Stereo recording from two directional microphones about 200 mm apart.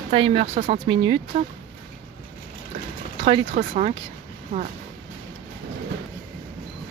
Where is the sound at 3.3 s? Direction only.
35° right (ahead or behind).